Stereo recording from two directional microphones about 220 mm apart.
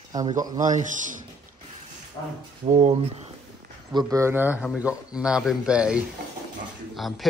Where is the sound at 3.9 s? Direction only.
15° right (ahead or behind).